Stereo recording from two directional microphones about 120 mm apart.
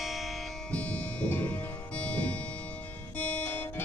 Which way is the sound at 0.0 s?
Centre (ahead or behind).